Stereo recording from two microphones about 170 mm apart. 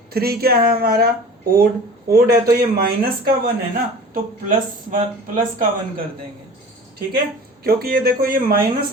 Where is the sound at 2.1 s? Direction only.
60° right (ahead or behind).